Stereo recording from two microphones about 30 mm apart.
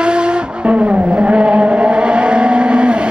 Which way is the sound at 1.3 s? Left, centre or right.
Right.